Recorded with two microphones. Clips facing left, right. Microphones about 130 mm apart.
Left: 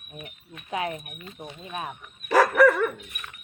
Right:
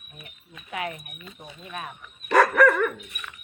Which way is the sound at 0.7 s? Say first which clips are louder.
Left 3 dB; 25° left (ahead or behind).